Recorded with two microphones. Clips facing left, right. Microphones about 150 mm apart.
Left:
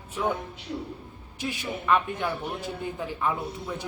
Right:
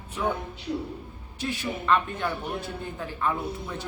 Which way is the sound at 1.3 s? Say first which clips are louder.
Right 1 dB; 10° left (ahead or behind).